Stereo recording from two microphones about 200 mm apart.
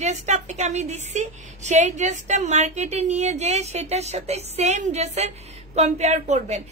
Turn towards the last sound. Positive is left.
turn(degrees=-35)  # may be behind; listen again after turning